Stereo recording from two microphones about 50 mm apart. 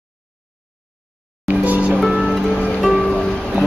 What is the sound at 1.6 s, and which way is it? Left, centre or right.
Music, right.